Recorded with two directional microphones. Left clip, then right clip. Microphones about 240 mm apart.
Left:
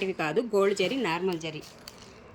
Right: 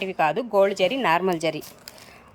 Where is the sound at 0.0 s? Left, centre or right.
Centre.